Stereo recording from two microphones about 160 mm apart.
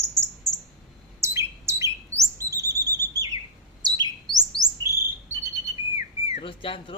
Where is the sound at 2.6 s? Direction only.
15° left (ahead or behind).